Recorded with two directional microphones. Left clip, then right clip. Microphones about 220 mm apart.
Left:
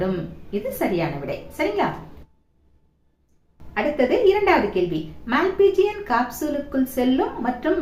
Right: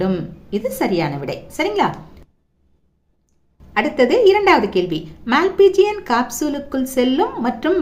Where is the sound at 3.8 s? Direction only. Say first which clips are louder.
Right 5 dB; 50° right (ahead or behind).